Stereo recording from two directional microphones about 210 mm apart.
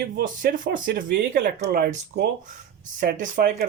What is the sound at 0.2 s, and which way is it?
Speech, 40° right (ahead or behind).